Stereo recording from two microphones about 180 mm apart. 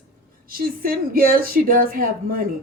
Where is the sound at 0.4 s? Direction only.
55° right (ahead or behind).